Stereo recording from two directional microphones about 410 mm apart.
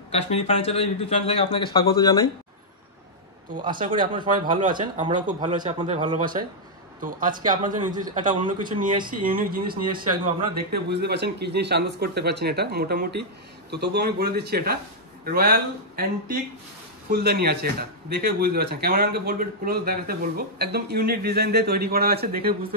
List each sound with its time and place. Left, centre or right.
0.1 s a man's voice: centre
3.5 s speech: centre
17.1 s speech: right